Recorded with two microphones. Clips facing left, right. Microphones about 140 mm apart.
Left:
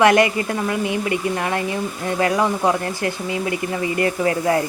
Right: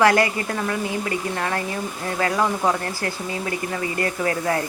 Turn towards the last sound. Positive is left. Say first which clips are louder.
# left 4 dB
turn(degrees=25)  # may be behind; listen again after turning